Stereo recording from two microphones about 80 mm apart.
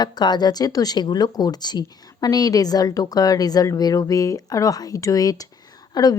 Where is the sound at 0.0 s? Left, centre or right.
Left.